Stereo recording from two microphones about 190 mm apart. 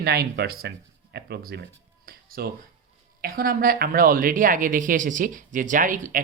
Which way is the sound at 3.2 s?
50° right (ahead or behind).